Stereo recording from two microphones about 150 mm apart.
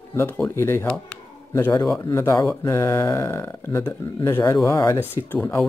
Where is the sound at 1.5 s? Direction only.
20° left (ahead or behind).